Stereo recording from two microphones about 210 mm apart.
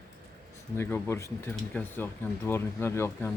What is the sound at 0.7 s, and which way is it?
Speech, 10° left (ahead or behind).